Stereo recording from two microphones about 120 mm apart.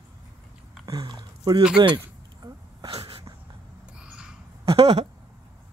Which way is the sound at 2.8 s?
50° right (ahead or behind).